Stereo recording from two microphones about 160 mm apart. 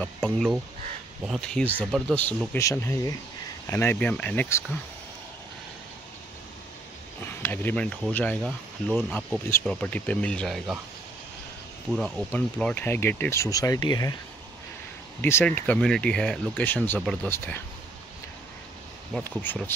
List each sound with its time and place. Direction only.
0.0 s speech: centre (ahead or behind)
7.2 s speech: 15° left (ahead or behind)
11.9 s speech: centre (ahead or behind); by 14.1 s 25° left (ahead or behind)
15.2 s speech: 15° left (ahead or behind)
17.0 s speech: centre (ahead or behind)
19.1 s speech: 10° left (ahead or behind)